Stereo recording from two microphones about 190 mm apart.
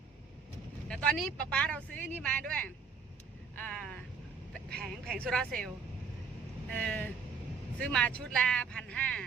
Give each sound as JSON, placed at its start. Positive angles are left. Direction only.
{"t": 0.9, "sound": "speech", "side_deg": 5}
{"t": 5.0, "sound": "speech", "side_deg": 5}
{"t": 6.7, "sound": "speech", "side_deg": 10}